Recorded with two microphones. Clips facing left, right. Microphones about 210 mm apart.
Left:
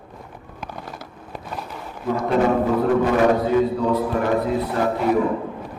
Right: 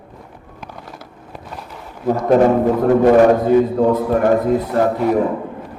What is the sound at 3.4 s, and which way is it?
Speech, 50° right (ahead or behind).